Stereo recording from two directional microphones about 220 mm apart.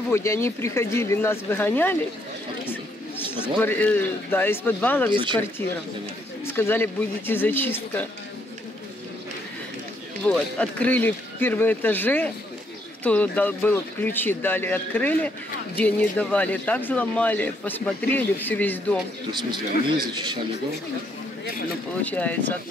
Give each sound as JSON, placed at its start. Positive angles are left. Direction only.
{"t": 0.1, "sound": "speech", "side_deg": 10}
{"t": 2.7, "sound": "a sound", "side_deg": 10}
{"t": 3.4, "sound": "speech", "side_deg": 5}
{"t": 5.1, "sound": "speech", "side_deg": -20}
{"t": 6.5, "sound": "speech", "side_deg": 10}
{"t": 10.2, "sound": "speech", "side_deg": 5}
{"t": 22.0, "sound": "speech", "side_deg": 5}